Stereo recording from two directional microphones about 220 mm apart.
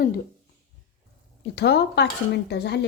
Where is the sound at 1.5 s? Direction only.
50° left (ahead or behind).